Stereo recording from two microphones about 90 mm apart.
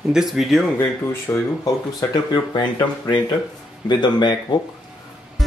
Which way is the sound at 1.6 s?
45° left (ahead or behind).